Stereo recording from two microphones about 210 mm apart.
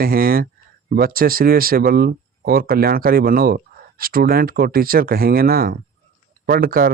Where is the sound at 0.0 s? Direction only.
45° right (ahead or behind).